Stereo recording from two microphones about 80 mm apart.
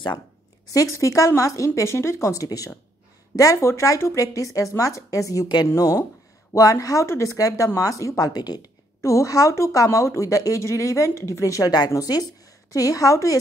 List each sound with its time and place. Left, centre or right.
0.7 s speech: left
9.0 s speech: left